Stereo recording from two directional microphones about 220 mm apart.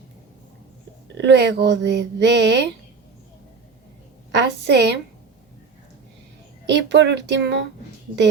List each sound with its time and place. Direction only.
1.1 s speech: 50° right (ahead or behind)
4.3 s speech: 50° right (ahead or behind)
6.7 s speech: 50° right (ahead or behind)